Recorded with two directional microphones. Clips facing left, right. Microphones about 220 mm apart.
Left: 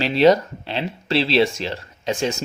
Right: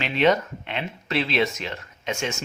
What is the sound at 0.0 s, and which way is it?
Speech, 35° left (ahead or behind).